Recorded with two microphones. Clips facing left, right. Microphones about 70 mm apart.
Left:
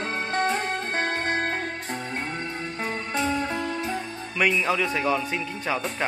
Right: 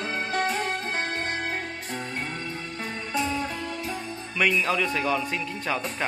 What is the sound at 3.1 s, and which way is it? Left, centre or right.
Music, left.